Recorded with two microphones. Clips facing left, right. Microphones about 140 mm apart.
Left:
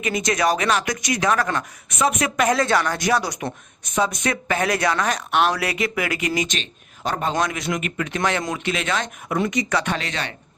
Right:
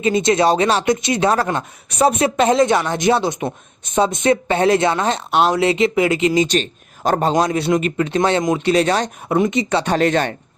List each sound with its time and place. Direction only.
0.0 s a woman's voice: 30° right (ahead or behind)
6.6 s a woman's voice: 45° right (ahead or behind)
10.0 s speech: 50° right (ahead or behind)